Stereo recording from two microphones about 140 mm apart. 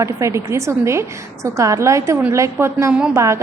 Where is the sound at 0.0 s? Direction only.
20° right (ahead or behind).